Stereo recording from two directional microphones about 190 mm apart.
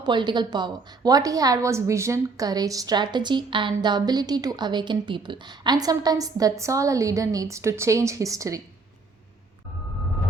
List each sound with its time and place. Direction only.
0.0 s a woman's voice: 25° right (ahead or behind)